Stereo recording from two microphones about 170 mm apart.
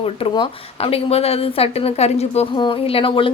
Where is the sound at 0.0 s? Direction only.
30° left (ahead or behind).